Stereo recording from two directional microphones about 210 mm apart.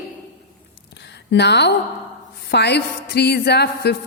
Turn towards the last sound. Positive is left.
turn(degrees=50)  # may be behind; listen again after turning